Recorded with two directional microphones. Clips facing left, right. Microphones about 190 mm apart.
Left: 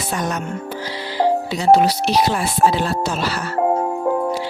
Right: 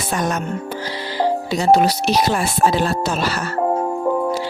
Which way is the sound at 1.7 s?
45° right (ahead or behind).